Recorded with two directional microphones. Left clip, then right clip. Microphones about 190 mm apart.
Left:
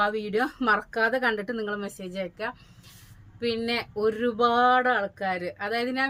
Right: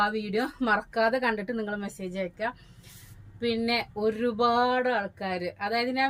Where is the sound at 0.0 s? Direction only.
20° left (ahead or behind).